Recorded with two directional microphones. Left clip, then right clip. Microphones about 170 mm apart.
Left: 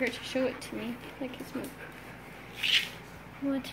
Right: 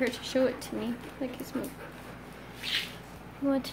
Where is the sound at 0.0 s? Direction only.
15° right (ahead or behind).